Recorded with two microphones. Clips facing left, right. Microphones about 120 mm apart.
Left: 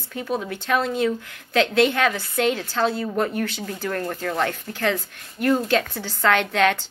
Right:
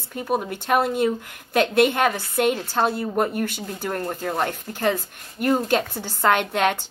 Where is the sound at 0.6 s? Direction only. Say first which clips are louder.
Right 1 dB; 50° right (ahead or behind).